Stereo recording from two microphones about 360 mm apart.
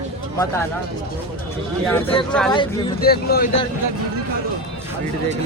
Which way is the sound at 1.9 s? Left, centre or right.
Centre.